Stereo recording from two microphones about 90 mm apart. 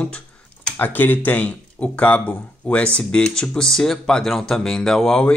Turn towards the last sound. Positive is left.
turn(degrees=5)  # may be behind; listen again after turning